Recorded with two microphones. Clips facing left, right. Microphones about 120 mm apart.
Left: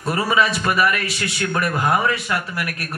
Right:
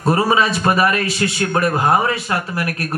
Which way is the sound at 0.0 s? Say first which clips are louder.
Right 4 dB; 35° right (ahead or behind).